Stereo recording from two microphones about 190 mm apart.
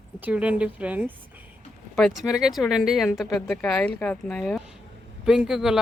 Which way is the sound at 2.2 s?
5° right (ahead or behind).